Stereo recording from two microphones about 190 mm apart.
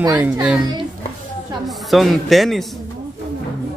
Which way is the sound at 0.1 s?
5° right (ahead or behind).